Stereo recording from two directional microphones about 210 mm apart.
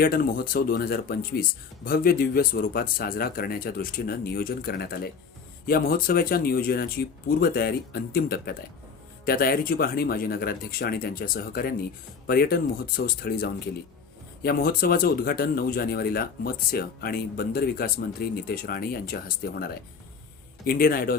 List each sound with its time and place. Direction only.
0.0 s speech: 45° left (ahead or behind)